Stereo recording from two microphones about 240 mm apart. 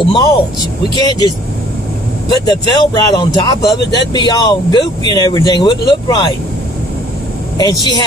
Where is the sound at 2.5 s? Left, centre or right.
Centre.